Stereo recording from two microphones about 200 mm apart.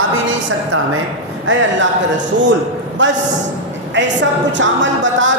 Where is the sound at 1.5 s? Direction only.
75° right (ahead or behind).